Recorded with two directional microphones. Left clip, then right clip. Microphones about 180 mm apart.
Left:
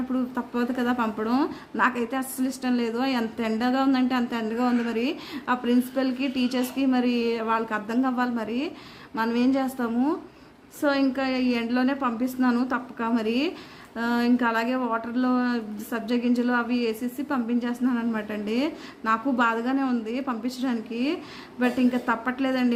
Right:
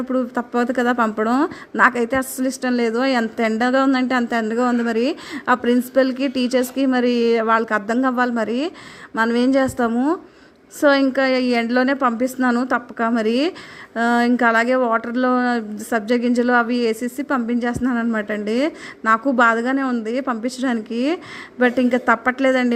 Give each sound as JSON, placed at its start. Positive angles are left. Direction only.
{"t": 0.1, "sound": "a woman's voice", "side_deg": -40}